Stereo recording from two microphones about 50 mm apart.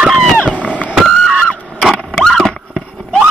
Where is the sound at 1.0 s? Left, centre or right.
Centre.